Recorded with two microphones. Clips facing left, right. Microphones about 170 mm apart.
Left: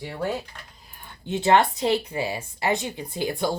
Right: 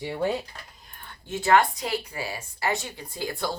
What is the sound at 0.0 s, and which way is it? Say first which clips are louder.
Speech: right 2 dB; 15° right (ahead or behind).